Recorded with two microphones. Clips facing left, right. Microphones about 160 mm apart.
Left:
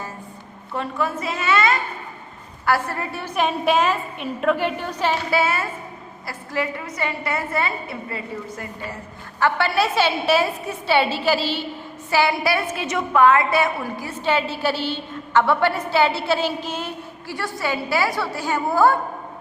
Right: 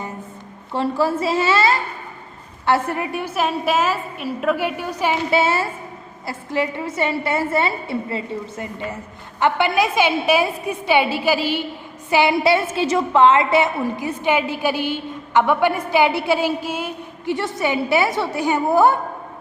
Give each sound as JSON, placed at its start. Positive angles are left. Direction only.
{"t": 0.7, "sound": "a woman's voice", "side_deg": -30}
{"t": 3.3, "sound": "a woman's voice", "side_deg": -5}
{"t": 5.3, "sound": "a woman's voice", "side_deg": -25}
{"t": 17.2, "sound": "a woman's voice", "side_deg": -20}